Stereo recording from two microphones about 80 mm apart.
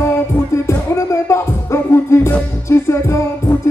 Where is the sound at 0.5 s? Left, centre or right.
Left.